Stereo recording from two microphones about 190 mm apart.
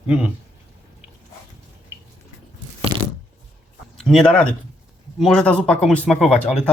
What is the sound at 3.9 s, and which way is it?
Speech, centre (ahead or behind).